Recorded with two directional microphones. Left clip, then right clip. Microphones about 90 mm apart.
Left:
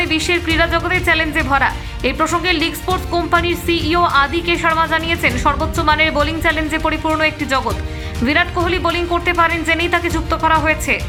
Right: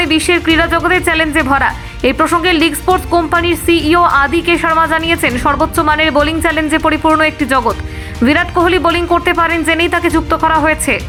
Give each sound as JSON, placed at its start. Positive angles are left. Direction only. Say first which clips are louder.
{"t": 0.0, "sound": "speech", "louder": "right 5 dB", "side_deg": -45}